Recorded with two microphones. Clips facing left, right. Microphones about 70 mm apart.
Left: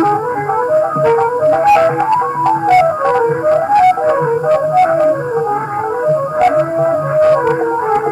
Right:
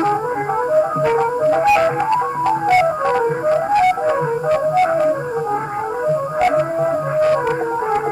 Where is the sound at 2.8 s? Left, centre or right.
Left.